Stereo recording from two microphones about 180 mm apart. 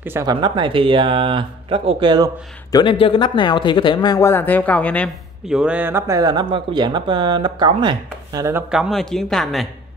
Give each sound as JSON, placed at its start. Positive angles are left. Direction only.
{"t": 0.0, "sound": "speech", "side_deg": -15}
{"t": 2.7, "sound": "speech", "side_deg": 25}
{"t": 5.5, "sound": "speech", "side_deg": -5}